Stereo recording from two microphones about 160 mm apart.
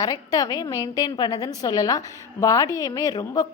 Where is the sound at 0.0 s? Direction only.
25° left (ahead or behind).